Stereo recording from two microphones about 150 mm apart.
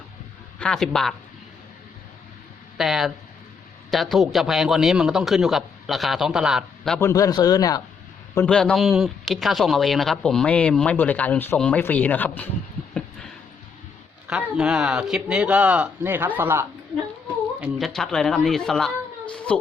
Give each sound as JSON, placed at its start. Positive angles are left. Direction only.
{"t": 0.6, "sound": "a man's voice", "side_deg": 5}
{"t": 2.7, "sound": "a man's voice", "side_deg": 0}
{"t": 7.0, "sound": "speech", "side_deg": 20}
{"t": 8.4, "sound": "speech", "side_deg": 5}
{"t": 12.9, "sound": "a sound", "side_deg": 5}
{"t": 14.3, "sound": "speech", "side_deg": -5}
{"t": 17.6, "sound": "a child's voice", "side_deg": 0}